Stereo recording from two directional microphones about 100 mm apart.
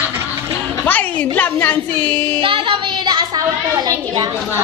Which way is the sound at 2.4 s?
60° right (ahead or behind).